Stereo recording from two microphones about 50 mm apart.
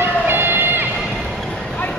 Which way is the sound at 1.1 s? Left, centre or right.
Centre.